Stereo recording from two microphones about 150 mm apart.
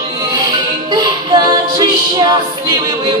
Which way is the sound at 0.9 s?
25° right (ahead or behind).